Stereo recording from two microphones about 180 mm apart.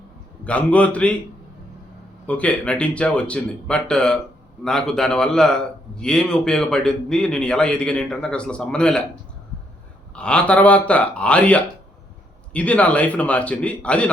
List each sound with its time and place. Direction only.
0.4 s speech: 5° left (ahead or behind)
2.2 s a man's voice: 10° left (ahead or behind)
10.2 s speech: 5° left (ahead or behind)